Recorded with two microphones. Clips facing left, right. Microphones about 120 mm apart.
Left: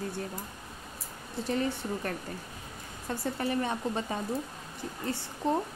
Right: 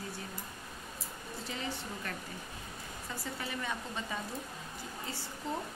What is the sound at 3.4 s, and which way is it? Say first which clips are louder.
Speech: left 8 dB; 45° left (ahead or behind).